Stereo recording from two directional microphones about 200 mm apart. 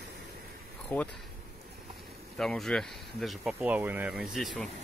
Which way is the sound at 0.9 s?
10° left (ahead or behind).